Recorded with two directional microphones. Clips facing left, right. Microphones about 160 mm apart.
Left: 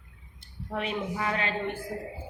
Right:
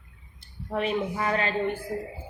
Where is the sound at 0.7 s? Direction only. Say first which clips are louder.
Right 4 dB; 40° right (ahead or behind).